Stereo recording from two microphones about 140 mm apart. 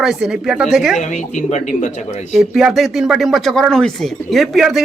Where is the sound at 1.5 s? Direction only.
60° left (ahead or behind).